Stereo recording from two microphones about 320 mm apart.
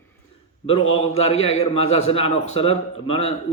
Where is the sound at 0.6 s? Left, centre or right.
Centre.